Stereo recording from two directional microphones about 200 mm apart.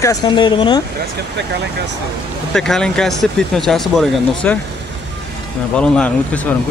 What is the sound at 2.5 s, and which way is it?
A man's voice, centre (ahead or behind).